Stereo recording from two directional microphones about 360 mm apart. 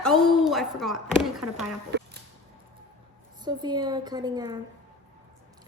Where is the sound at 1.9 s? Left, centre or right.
Right.